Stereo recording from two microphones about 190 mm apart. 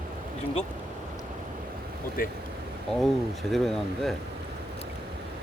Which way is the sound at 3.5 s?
Centre (ahead or behind).